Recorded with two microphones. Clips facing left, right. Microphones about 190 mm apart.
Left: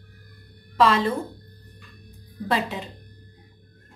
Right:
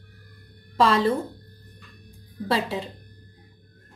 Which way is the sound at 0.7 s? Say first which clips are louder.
Even; 35° right (ahead or behind).